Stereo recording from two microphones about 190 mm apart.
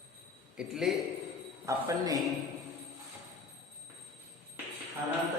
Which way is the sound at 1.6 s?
15° right (ahead or behind).